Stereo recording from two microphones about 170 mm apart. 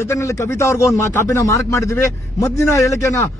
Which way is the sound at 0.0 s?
15° left (ahead or behind).